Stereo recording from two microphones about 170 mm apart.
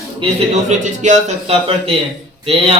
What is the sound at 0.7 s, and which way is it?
A man's voice, 45° right (ahead or behind).